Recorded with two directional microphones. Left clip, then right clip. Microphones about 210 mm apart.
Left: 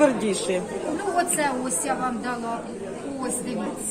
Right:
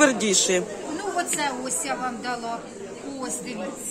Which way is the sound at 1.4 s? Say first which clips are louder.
Left 2 dB; 20° right (ahead or behind).